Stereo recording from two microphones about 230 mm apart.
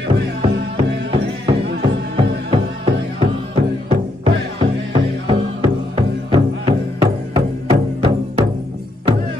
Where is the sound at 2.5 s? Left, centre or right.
Right.